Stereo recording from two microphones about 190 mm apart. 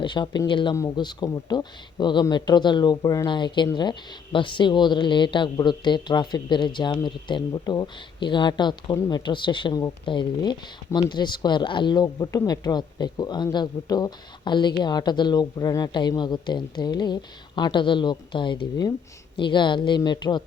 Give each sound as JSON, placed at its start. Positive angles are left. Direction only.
{"t": 0.0, "sound": "speech", "side_deg": 25}